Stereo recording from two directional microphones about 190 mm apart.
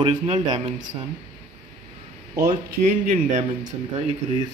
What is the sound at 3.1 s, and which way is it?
Speech, 40° right (ahead or behind).